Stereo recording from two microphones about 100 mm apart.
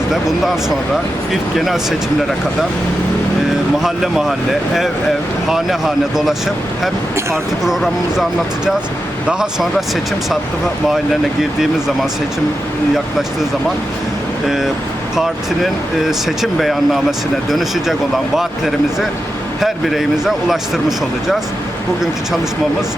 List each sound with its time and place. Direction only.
0.1 s speech: 5° right (ahead or behind)
3.8 s speech: centre (ahead or behind)
7.6 s speech: 5° right (ahead or behind)
9.2 s speech: 5° right (ahead or behind)
10.8 s speech: centre (ahead or behind)
14.4 s speech: 5° right (ahead or behind)